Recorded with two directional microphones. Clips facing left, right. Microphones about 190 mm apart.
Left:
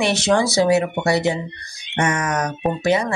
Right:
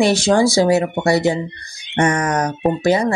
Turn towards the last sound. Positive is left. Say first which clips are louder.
# right 3 dB
turn(degrees=-35)  # may be behind; listen again after turning